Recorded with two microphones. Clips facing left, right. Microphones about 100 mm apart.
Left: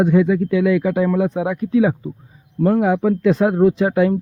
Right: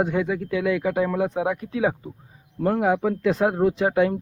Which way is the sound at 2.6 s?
35° right (ahead or behind).